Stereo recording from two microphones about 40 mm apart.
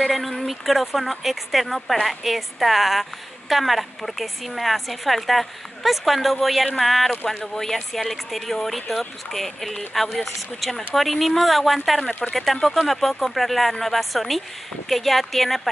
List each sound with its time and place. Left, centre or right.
0.1 s a woman's voice: centre